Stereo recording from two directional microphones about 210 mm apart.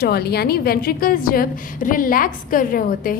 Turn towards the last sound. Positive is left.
turn(degrees=40)  # may be behind; listen again after turning